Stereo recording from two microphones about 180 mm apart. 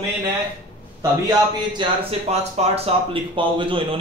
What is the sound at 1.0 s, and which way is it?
A man's voice, 25° right (ahead or behind).